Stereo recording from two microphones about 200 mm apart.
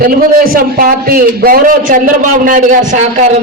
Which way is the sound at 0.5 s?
45° right (ahead or behind).